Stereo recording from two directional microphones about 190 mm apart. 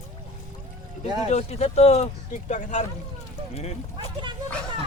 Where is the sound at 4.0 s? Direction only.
25° right (ahead or behind).